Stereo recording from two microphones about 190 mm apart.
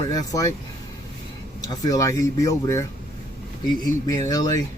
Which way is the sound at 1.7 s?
20° left (ahead or behind).